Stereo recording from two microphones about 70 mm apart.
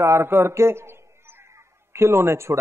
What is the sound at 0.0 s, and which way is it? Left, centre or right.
Speech, right.